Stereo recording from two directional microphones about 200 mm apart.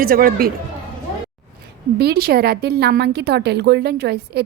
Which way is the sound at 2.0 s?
50° right (ahead or behind).